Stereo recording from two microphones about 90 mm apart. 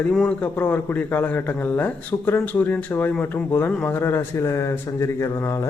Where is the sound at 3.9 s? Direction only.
25° left (ahead or behind).